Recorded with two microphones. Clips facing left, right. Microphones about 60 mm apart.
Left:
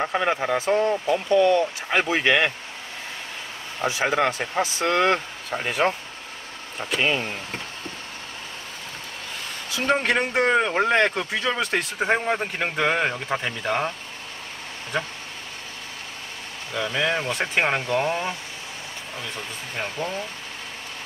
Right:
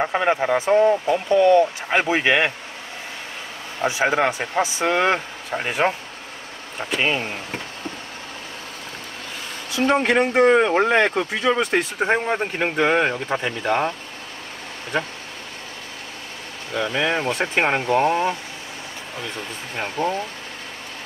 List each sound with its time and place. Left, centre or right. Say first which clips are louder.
0.0 s speech: right 3 dB; centre
3.8 s speech: right 3 dB; centre
7.0 s speech: right 1 dB; centre
9.8 s speech: right 4 dB; centre
16.7 s speech: right 2 dB; centre
20.0 s speech: right 8 dB; right